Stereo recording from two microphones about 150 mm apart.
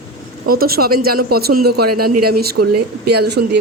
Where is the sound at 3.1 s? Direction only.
90° right.